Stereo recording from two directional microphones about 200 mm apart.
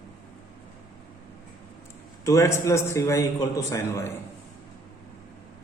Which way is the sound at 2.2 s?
15° left (ahead or behind).